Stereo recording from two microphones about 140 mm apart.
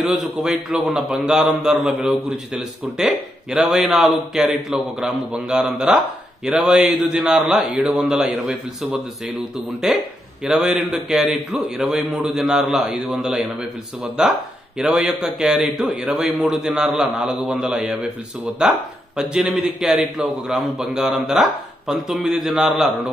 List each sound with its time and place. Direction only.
0.0 s a man's voice: centre (ahead or behind)